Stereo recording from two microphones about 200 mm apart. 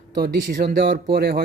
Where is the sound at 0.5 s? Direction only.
50° right (ahead or behind).